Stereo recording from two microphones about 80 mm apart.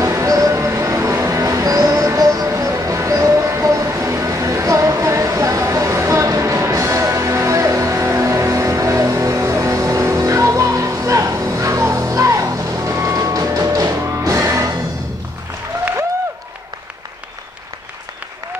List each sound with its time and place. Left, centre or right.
0.0 s music: right